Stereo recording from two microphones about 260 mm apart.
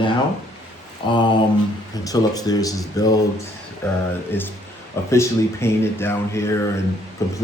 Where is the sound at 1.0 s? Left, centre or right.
Centre.